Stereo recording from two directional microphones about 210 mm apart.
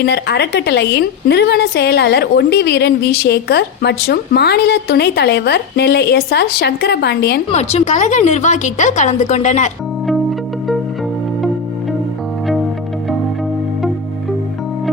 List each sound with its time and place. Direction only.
0.0 s a woman's voice: 55° left (ahead or behind)
7.5 s speech: 30° left (ahead or behind)
10.1 s music: centre (ahead or behind)